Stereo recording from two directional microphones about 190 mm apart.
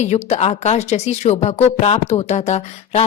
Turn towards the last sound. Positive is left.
turn(degrees=35)  # may be behind; listen again after turning